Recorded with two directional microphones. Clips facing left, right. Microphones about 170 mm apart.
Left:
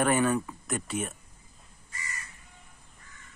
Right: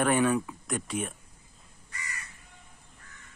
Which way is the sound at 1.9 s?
65° right (ahead or behind).